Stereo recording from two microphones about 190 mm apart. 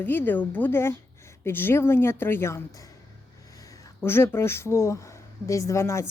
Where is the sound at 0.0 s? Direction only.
10° left (ahead or behind).